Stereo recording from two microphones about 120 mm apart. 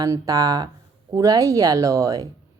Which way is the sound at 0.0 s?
30° right (ahead or behind).